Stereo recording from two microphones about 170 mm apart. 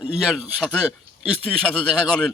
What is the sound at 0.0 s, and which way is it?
A man's voice, 5° right (ahead or behind).